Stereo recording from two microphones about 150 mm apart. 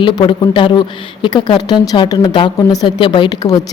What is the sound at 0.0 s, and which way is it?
A woman's voice, 35° left (ahead or behind).